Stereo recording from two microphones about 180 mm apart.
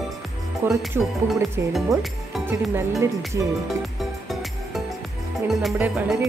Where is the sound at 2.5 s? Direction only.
15° right (ahead or behind).